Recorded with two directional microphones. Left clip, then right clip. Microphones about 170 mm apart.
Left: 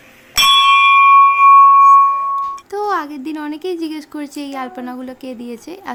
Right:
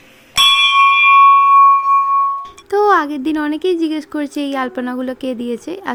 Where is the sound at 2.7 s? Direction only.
25° right (ahead or behind).